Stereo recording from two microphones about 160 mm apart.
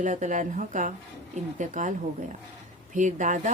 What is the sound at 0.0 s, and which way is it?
A woman's voice, 50° right (ahead or behind).